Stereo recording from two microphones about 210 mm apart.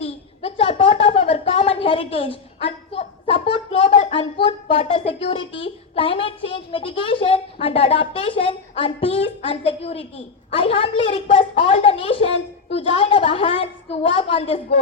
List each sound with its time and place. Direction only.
0.0 s a woman's voice: 25° left (ahead or behind)